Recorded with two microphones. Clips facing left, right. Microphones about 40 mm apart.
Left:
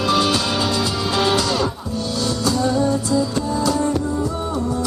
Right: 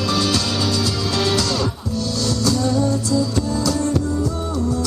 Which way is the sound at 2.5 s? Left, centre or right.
Left.